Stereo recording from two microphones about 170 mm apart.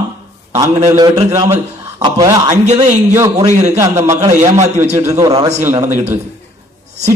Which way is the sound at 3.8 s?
15° right (ahead or behind).